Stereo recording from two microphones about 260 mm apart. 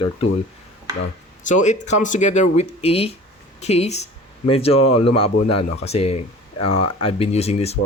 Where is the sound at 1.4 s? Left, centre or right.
Left.